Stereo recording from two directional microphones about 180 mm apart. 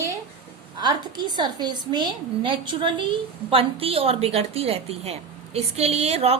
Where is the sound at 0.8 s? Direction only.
25° right (ahead or behind).